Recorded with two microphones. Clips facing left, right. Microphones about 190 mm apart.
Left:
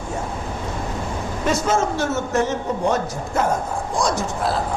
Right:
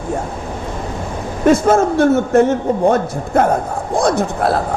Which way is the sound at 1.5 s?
55° right (ahead or behind).